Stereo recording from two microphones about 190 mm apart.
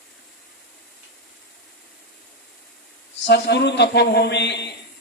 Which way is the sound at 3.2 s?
60° left (ahead or behind).